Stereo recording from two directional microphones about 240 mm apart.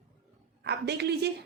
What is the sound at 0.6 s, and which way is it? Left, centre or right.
Speech, right.